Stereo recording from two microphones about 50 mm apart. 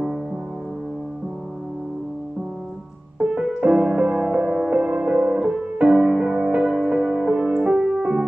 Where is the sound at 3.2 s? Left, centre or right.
Centre.